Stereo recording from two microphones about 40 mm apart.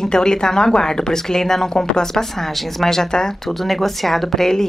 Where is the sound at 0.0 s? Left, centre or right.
Centre.